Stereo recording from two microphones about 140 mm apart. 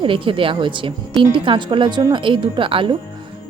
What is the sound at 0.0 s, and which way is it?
A woman's voice, 40° right (ahead or behind).